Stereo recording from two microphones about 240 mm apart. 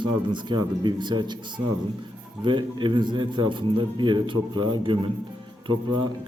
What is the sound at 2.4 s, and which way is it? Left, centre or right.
A man's voice, centre.